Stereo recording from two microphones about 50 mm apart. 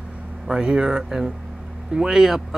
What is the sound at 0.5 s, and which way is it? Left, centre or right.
Speech, centre.